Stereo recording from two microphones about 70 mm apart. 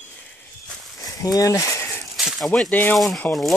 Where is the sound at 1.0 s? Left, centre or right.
Left.